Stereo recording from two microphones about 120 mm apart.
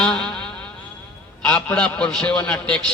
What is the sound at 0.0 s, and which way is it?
Music, 5° left (ahead or behind).